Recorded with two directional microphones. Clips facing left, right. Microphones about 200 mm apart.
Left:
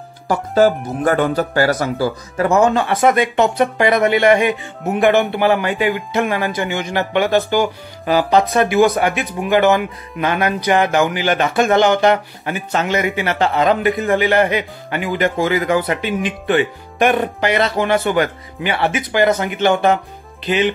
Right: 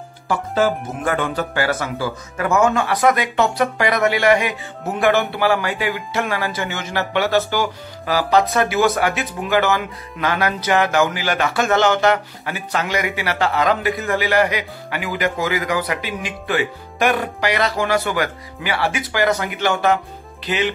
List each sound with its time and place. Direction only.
0.3 s speech: 40° left (ahead or behind); by 20.7 s 20° left (ahead or behind)